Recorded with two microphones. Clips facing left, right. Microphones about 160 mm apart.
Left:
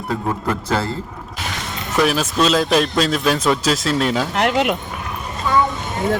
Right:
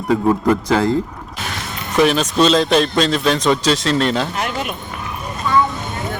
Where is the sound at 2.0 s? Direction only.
5° left (ahead or behind).